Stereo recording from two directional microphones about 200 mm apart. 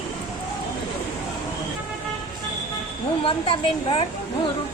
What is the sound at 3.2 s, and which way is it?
Speech, 25° left (ahead or behind).